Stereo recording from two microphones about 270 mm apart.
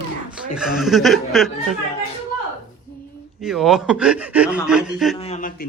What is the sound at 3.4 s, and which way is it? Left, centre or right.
Speech, centre.